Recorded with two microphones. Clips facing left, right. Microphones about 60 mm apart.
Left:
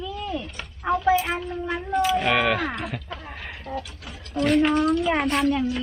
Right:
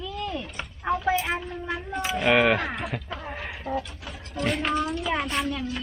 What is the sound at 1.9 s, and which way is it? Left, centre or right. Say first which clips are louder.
A woman's voice: left 1 dB; centre.